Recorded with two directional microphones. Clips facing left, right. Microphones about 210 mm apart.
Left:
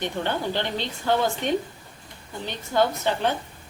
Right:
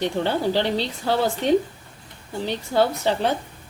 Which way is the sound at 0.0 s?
35° right (ahead or behind).